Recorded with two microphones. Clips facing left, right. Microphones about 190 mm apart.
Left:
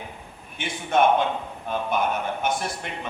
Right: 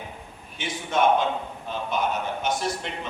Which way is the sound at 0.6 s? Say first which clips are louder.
Left 2 dB; 55° left (ahead or behind).